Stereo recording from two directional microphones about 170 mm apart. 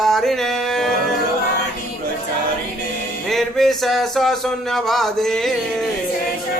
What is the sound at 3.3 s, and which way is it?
Speech, centre (ahead or behind).